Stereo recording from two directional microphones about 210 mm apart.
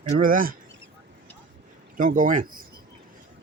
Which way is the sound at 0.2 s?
40° right (ahead or behind).